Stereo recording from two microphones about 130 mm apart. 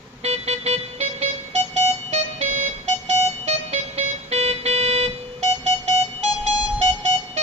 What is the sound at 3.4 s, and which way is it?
Music, 55° right (ahead or behind).